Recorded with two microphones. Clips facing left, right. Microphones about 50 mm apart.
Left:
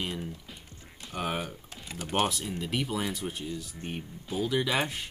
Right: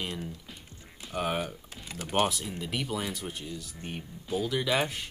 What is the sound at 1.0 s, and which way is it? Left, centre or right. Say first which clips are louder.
Speech: right 2 dB; centre.